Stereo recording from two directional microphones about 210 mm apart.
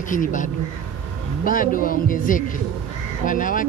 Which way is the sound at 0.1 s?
40° left (ahead or behind).